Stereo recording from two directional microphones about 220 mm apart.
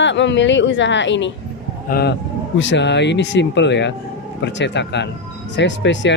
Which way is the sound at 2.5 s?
55° left (ahead or behind).